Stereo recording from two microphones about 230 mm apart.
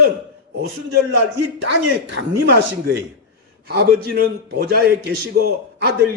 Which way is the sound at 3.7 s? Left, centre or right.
Right.